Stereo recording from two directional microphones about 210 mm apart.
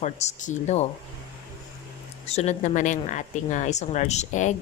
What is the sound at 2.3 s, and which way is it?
Speech, 30° left (ahead or behind).